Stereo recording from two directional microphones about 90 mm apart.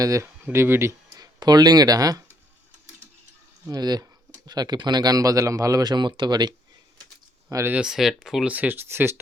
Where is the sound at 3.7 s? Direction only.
50° right (ahead or behind).